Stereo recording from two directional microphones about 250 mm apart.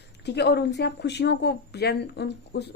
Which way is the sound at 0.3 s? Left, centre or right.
Left.